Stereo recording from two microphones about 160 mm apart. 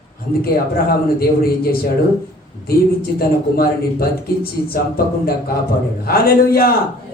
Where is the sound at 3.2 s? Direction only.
70° left (ahead or behind).